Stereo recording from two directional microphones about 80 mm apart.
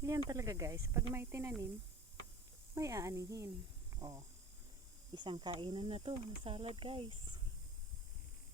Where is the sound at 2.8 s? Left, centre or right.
Right.